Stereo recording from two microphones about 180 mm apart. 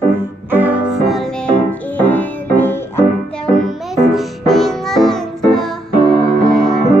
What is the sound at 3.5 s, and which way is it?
Music, centre (ahead or behind).